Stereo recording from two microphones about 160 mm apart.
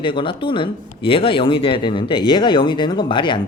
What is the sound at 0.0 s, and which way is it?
Speech, 30° left (ahead or behind).